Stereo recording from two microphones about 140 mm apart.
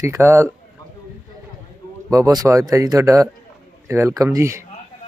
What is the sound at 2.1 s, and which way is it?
A man's voice, 25° right (ahead or behind).